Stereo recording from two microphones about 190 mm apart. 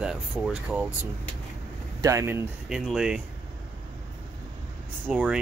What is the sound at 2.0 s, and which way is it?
Speech, 15° right (ahead or behind).